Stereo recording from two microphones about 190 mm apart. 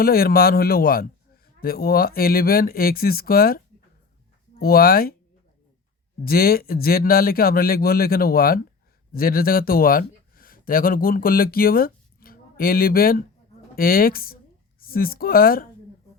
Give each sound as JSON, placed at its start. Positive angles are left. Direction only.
{"t": 0.0, "sound": "a man's voice", "side_deg": 50}
{"t": 4.6, "sound": "a man's voice", "side_deg": 50}
{"t": 6.2, "sound": "a man's voice", "side_deg": 50}